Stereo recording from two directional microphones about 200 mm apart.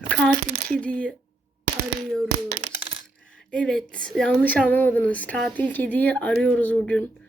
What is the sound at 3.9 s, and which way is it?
Speech, 5° left (ahead or behind).